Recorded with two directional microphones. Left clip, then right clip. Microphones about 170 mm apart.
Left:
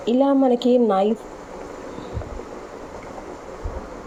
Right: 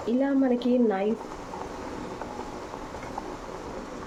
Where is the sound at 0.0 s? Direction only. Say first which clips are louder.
Left 8 dB; 30° left (ahead or behind).